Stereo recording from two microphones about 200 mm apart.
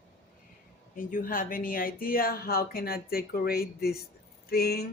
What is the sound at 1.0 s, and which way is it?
Speech, 45° left (ahead or behind).